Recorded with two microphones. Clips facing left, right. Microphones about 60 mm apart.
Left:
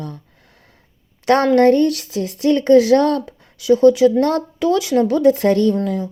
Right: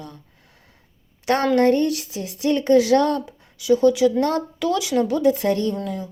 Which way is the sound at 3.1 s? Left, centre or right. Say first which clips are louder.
Left 4 dB; left.